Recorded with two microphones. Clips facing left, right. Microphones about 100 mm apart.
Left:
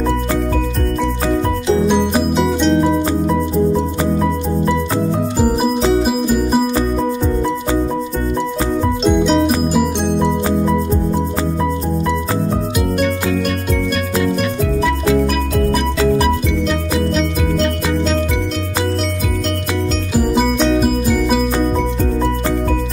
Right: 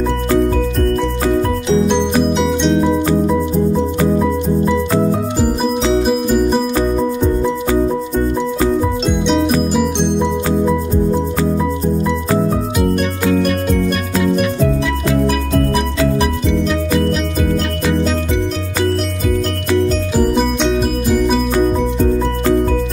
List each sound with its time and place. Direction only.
1.7 s music: 5° left (ahead or behind)
5.8 s music: 5° left (ahead or behind)
9.0 s music: centre (ahead or behind)